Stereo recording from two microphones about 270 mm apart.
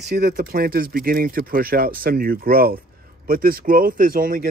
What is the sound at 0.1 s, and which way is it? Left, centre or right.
Speech, right.